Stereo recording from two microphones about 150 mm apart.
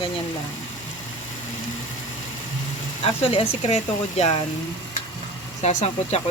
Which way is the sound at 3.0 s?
40° left (ahead or behind).